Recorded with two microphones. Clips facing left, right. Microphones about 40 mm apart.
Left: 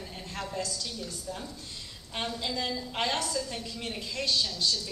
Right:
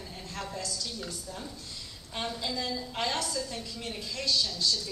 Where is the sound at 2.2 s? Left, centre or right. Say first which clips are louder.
Left 1 dB; centre.